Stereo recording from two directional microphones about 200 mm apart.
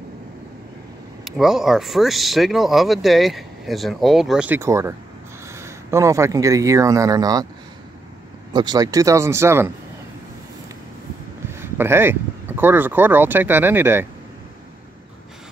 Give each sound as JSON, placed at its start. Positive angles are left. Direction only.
{"t": 1.2, "sound": "speech", "side_deg": 0}
{"t": 8.5, "sound": "speech", "side_deg": -20}
{"t": 11.5, "sound": "speech", "side_deg": -10}